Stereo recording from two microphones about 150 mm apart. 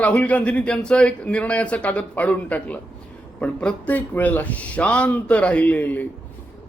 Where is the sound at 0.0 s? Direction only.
10° left (ahead or behind).